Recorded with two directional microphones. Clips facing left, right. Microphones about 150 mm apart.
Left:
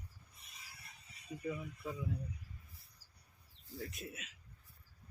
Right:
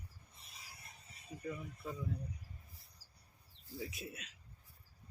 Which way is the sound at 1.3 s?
30° right (ahead or behind).